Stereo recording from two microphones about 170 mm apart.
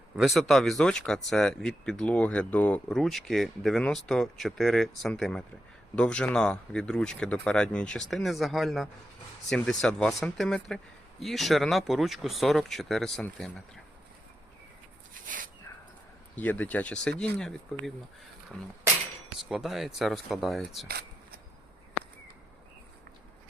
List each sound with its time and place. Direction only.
0.2 s speech: centre (ahead or behind)
16.3 s speech: 10° left (ahead or behind)
19.4 s speech: centre (ahead or behind)
20.8 s a sound: 65° right (ahead or behind)